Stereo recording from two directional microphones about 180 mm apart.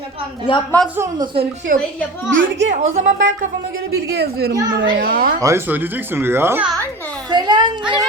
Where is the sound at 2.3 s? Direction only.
85° right.